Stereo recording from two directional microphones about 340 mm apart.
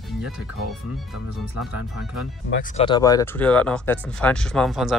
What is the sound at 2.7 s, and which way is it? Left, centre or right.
Speech, centre.